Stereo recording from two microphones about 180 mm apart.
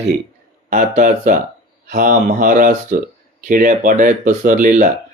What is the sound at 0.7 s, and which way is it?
Speech, 50° right (ahead or behind).